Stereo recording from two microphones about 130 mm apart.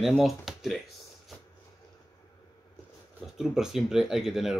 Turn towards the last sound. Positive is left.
turn(degrees=-5)  # may be behind; listen again after turning